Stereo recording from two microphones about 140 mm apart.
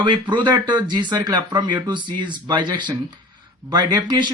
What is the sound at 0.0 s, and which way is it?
Speech, 35° right (ahead or behind).